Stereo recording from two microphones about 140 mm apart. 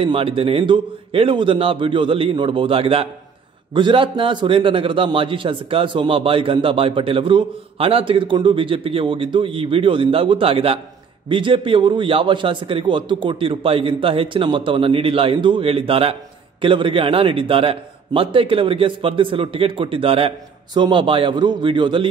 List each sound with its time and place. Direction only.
0.0 s a man's voice: 40° right (ahead or behind)